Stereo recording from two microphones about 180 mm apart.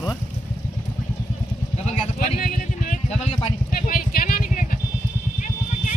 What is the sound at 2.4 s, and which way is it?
Vehicle, 50° left (ahead or behind).